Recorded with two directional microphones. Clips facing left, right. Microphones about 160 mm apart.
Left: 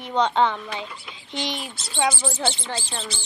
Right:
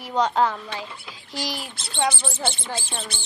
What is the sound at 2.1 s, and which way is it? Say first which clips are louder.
Speech: left 2 dB; 55° right (ahead or behind).